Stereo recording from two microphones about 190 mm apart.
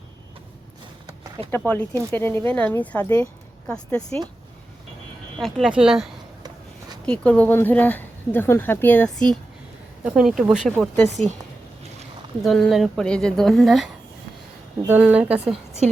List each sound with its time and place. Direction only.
1.5 s a woman's voice: 10° left (ahead or behind)
5.4 s a woman's voice: centre (ahead or behind)
12.4 s a woman's voice: centre (ahead or behind)